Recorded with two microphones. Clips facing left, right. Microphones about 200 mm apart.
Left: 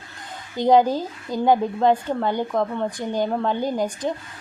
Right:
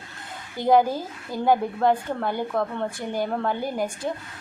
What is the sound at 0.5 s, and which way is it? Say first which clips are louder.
A woman's voice: left 3 dB; 20° left (ahead or behind).